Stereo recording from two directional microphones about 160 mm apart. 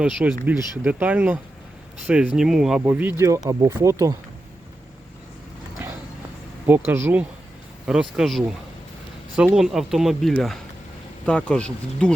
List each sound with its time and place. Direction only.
0.0 s speech: 5° right (ahead or behind)
6.7 s speech: 15° right (ahead or behind)
9.6 s speech: centre (ahead or behind)